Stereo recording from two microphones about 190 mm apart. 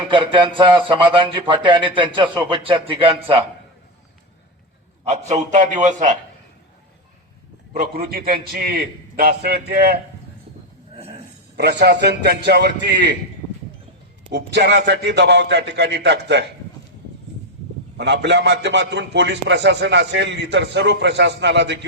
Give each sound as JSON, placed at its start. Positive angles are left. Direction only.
{"t": 0.1, "sound": "a man's voice", "side_deg": -25}
{"t": 5.0, "sound": "a man's voice", "side_deg": -35}
{"t": 7.7, "sound": "a man's voice", "side_deg": -50}
{"t": 11.5, "sound": "a man's voice", "side_deg": -60}
{"t": 14.3, "sound": "a man's voice", "side_deg": -65}
{"t": 17.9, "sound": "a man's voice", "side_deg": -65}